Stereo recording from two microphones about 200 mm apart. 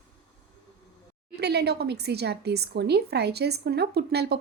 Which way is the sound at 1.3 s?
55° right (ahead or behind).